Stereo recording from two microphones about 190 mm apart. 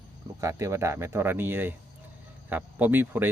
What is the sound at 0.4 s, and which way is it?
A man's voice, 15° right (ahead or behind).